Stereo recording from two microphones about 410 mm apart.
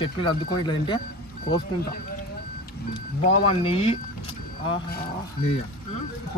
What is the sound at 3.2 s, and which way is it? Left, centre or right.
Speech, centre.